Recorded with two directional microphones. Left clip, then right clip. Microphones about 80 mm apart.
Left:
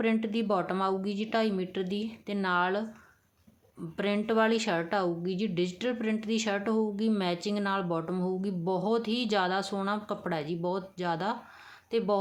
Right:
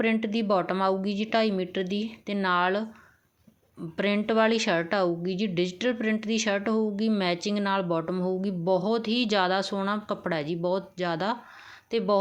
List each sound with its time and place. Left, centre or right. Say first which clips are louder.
0.0 s a woman's voice: right 3 dB; right
3.9 s a woman's voice: right 3 dB; right